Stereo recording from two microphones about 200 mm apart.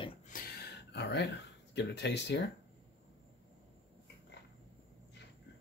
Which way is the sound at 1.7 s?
60° left (ahead or behind).